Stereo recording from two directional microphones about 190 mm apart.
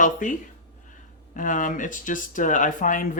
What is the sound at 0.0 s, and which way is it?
Speech, 40° left (ahead or behind).